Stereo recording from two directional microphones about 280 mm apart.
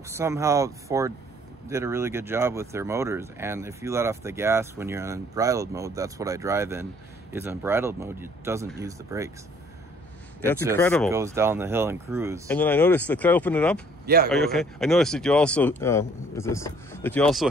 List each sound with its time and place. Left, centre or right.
0.1 s speech: centre
10.8 s speech: centre
11.1 s speech: centre
12.4 s speech: centre
14.0 s a man's voice: right
14.3 s speech: centre